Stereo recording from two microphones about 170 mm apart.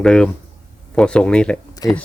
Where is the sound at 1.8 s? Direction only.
20° left (ahead or behind).